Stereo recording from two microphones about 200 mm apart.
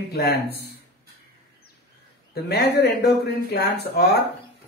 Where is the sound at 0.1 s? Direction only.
50° left (ahead or behind).